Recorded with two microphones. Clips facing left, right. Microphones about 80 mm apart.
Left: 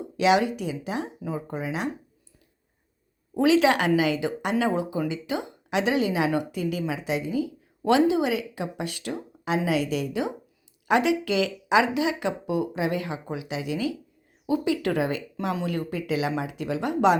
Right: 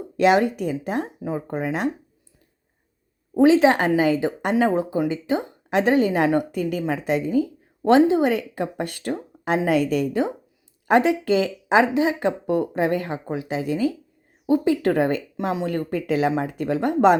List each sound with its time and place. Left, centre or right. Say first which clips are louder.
0.2 s a woman's voice: right 4 dB; right
3.3 s a woman's voice: right 4 dB; right